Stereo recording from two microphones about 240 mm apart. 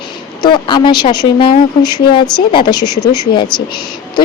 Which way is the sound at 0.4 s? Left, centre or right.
Centre.